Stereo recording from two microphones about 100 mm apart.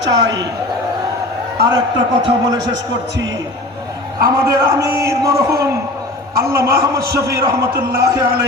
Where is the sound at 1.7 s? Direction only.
45° right (ahead or behind).